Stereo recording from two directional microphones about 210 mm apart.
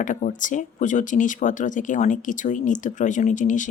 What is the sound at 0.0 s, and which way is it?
Speech, 35° left (ahead or behind).